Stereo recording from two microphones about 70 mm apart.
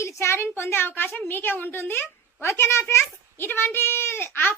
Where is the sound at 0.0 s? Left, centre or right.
Left.